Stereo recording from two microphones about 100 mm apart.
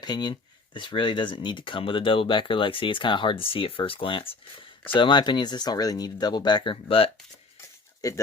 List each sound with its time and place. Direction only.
0.0 s speech: 45° left (ahead or behind); by 7.1 s 70° left (ahead or behind)
8.0 s speech: 40° left (ahead or behind)